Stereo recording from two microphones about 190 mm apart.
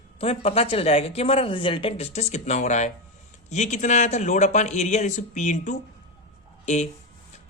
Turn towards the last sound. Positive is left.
turn(degrees=35)  # may be behind; listen again after turning